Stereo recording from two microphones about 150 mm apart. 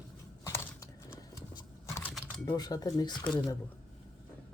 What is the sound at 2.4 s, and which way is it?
Speech, 25° left (ahead or behind).